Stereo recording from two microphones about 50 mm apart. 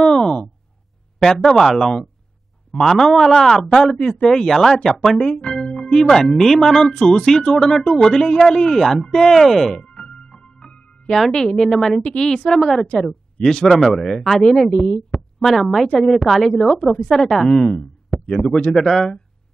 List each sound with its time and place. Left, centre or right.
0.2 s a sound: centre
1.2 s speech: centre
5.1 s music: centre
6.0 s speech: centre
9.8 s music: centre
11.1 s speech: centre
18.6 s speech: centre